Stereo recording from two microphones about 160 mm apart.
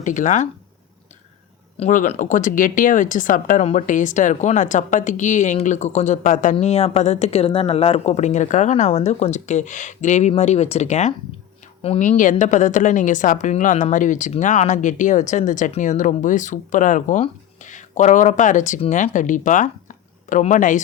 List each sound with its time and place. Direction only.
0.0 s speech: 50° left (ahead or behind)
1.8 s speech: 50° left (ahead or behind)
12.0 s speech: 55° left (ahead or behind)